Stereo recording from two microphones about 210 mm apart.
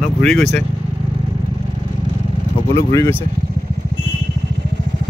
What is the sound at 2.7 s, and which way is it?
Speech, 15° left (ahead or behind).